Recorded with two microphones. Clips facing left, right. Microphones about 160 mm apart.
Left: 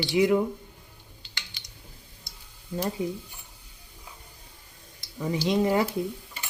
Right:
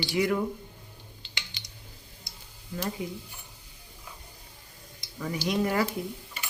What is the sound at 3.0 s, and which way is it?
Speech, 30° left (ahead or behind).